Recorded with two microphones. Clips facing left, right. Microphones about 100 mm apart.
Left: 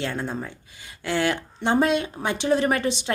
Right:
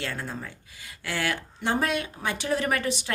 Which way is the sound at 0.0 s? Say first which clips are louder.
Left 5 dB; 25° left (ahead or behind).